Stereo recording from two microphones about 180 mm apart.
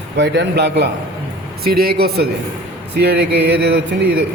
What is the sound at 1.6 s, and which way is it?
Speech, 55° right (ahead or behind).